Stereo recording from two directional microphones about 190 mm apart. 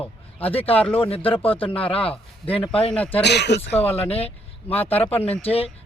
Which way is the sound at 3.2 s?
65° left (ahead or behind).